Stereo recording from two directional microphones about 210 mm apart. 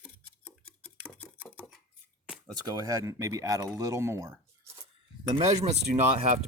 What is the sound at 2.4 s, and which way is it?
Speech, 20° right (ahead or behind).